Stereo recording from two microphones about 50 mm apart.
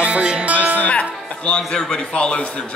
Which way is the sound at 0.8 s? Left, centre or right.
Left.